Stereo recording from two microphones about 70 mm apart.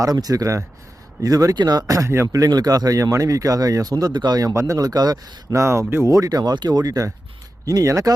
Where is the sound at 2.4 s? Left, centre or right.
Right.